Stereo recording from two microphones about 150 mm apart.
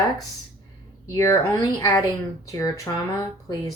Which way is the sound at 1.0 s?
20° left (ahead or behind).